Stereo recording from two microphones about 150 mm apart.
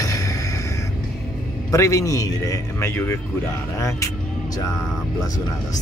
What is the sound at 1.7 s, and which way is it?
A man's voice, 20° left (ahead or behind).